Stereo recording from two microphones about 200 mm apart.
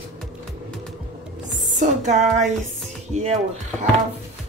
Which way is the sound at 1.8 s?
35° right (ahead or behind).